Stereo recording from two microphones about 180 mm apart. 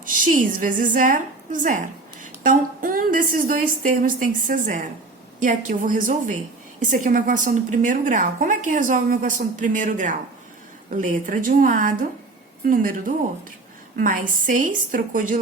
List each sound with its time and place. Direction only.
0.0 s a woman's voice: 50° right (ahead or behind)